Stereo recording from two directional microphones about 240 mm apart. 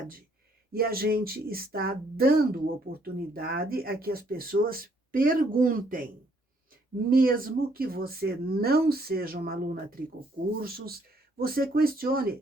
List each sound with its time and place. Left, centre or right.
0.7 s speech: right
7.1 s speech: right